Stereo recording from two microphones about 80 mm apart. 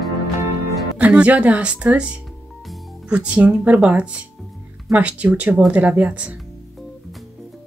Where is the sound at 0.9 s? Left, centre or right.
Centre.